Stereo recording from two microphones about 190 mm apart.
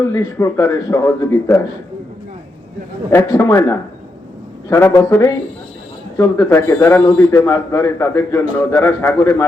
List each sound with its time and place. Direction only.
0.0 s a man's voice: 15° left (ahead or behind)
3.1 s a man's voice: 15° left (ahead or behind)